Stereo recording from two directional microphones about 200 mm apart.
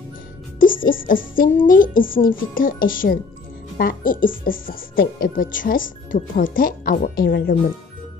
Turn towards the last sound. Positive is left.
turn(degrees=50)  # may be behind; listen again after turning